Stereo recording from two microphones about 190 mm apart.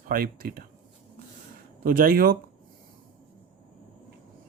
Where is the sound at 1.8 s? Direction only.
45° right (ahead or behind).